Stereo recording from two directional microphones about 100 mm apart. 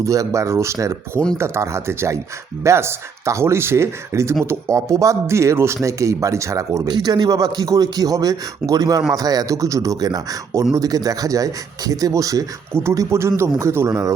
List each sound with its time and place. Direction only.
0.0 s a man's voice: 30° right (ahead or behind)
6.8 s a man's voice: 45° right (ahead or behind); by 14.1 s 30° right (ahead or behind)